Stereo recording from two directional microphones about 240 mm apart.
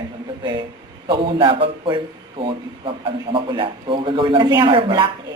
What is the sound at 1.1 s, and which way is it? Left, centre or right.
A man's voice, right.